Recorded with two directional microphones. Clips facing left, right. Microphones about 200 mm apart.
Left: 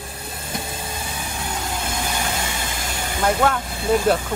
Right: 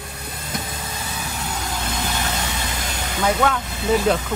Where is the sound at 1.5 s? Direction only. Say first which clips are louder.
Left 1 dB; 10° left (ahead or behind).